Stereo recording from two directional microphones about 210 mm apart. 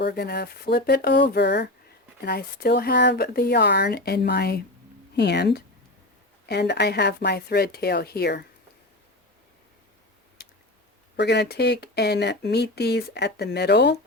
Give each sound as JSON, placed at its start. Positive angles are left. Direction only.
{"t": 0.0, "sound": "speech", "side_deg": 50}
{"t": 10.4, "sound": "a sound", "side_deg": 50}
{"t": 11.2, "sound": "speech", "side_deg": 50}